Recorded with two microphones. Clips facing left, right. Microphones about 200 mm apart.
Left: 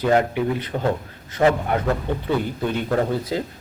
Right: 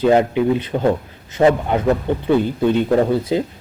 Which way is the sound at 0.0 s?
20° right (ahead or behind).